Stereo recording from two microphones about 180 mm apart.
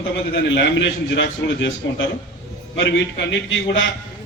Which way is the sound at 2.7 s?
80° left.